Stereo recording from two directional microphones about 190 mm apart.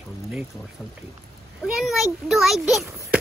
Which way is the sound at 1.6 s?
Centre (ahead or behind).